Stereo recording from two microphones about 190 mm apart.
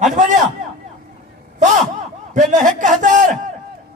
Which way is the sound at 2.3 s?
40° right (ahead or behind).